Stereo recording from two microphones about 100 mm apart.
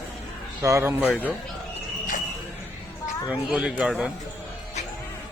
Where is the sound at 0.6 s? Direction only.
25° right (ahead or behind).